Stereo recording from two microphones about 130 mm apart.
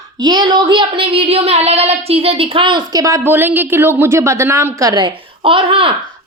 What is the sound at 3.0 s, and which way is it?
A woman's voice, 20° right (ahead or behind).